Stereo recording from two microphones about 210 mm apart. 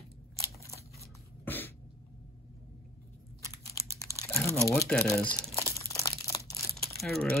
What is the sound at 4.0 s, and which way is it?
Computer keyboard, 15° left (ahead or behind).